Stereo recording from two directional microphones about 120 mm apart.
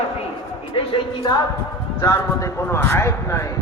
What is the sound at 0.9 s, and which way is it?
Speech, 35° left (ahead or behind).